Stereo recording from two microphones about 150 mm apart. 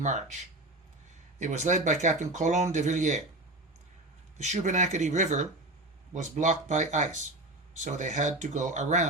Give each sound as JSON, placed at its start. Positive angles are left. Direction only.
{"t": 0.0, "sound": "speech", "side_deg": -50}
{"t": 4.4, "sound": "speech", "side_deg": -50}